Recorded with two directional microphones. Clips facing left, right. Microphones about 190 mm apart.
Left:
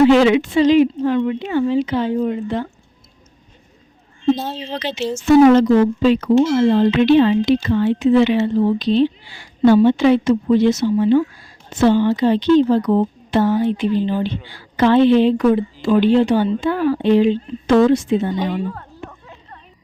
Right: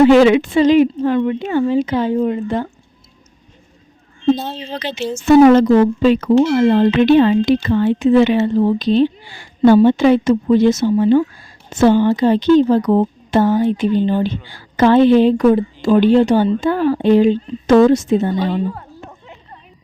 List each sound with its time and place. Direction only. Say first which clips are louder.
0.1 s speech: right 3 dB; 50° right (ahead or behind)
4.4 s speech: even; 5° left (ahead or behind)
4.6 s speech: even; 50° right (ahead or behind)